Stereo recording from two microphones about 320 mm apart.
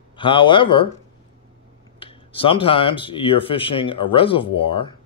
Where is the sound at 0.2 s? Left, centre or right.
Centre.